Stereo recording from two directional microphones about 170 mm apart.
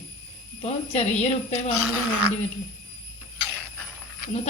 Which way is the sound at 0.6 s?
40° left (ahead or behind).